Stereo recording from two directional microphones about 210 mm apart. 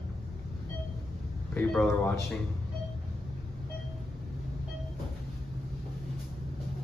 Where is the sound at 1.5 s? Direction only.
5° left (ahead or behind).